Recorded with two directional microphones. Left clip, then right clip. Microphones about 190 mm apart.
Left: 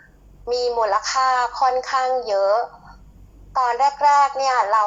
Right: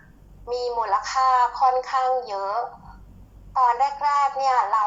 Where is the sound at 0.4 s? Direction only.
15° left (ahead or behind).